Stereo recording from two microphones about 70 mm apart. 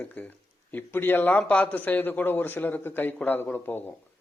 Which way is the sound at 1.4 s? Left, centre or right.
Centre.